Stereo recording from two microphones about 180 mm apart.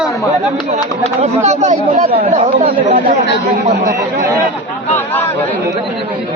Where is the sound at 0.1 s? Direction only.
15° left (ahead or behind).